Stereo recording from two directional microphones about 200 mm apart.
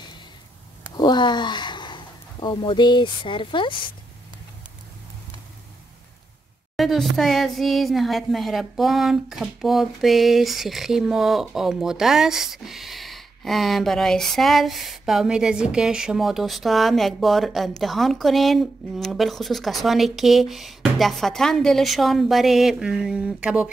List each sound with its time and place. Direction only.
0.9 s speech: 20° left (ahead or behind)
6.8 s speech: centre (ahead or behind)